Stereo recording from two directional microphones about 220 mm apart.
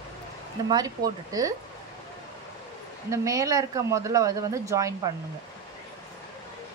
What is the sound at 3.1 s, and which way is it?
A woman's voice, 15° right (ahead or behind).